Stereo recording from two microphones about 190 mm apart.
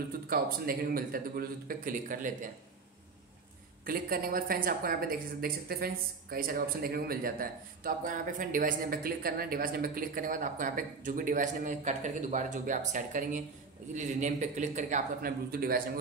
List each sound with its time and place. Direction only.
0.3 s speech: 50° right (ahead or behind)
3.8 s a man's voice: 50° right (ahead or behind)